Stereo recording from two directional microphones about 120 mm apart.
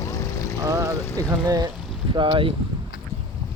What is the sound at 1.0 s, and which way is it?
Speech, 20° left (ahead or behind).